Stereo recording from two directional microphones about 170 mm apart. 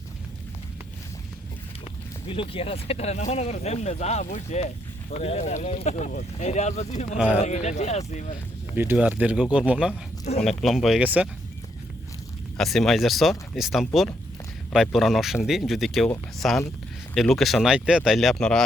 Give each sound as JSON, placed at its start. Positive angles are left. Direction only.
{"t": 2.2, "sound": "speech", "side_deg": 30}
{"t": 8.7, "sound": "speech", "side_deg": -10}
{"t": 10.3, "sound": "speech", "side_deg": 40}
{"t": 10.6, "sound": "speech", "side_deg": 0}
{"t": 12.5, "sound": "speech", "side_deg": 0}